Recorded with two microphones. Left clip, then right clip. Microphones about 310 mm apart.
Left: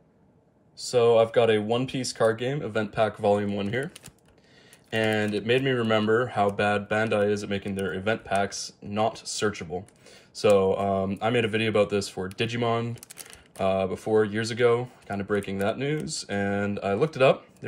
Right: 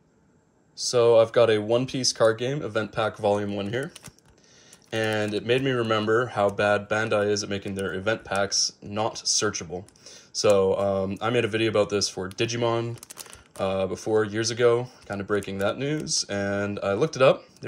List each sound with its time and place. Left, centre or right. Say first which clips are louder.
0.8 s speech: right 2 dB; centre